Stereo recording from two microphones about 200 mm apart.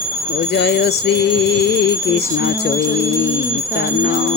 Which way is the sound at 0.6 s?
60° left (ahead or behind).